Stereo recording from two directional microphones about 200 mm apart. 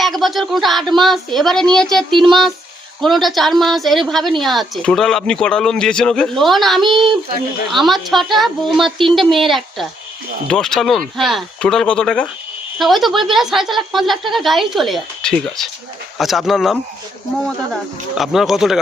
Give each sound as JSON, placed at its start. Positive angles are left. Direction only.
{"t": 0.0, "sound": "speech", "side_deg": 0}
{"t": 6.9, "sound": "child singing", "side_deg": -25}
{"t": 7.7, "sound": "speech", "side_deg": 0}
{"t": 18.1, "sound": "speech", "side_deg": 0}